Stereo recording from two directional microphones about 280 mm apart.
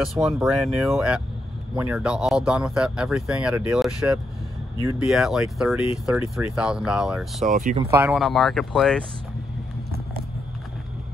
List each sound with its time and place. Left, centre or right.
0.0 s speech: centre
7.5 s speech: right
7.8 s speech: centre